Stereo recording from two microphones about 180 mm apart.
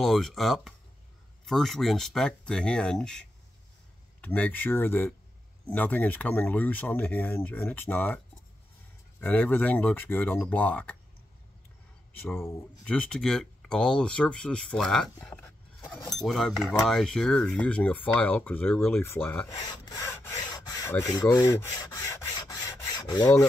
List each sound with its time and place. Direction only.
0.0 s speech: centre (ahead or behind)
9.2 s speech: 10° left (ahead or behind)
12.1 s speech: 10° left (ahead or behind)
15.1 s a sound: 10° left (ahead or behind)
16.3 s speech: centre (ahead or behind)
19.5 s rub: 15° left (ahead or behind)